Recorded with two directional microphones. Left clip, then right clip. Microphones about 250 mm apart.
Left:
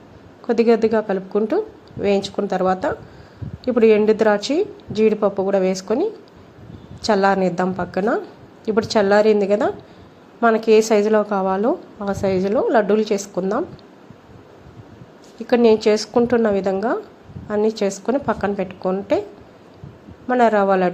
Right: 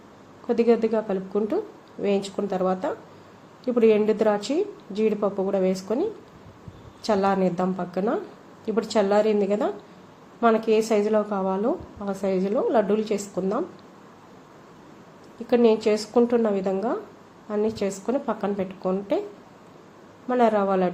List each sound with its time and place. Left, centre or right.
0.4 s a woman's voice: centre
15.4 s a woman's voice: centre
20.2 s a woman's voice: centre